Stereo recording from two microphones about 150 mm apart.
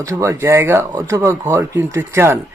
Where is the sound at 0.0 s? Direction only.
20° right (ahead or behind).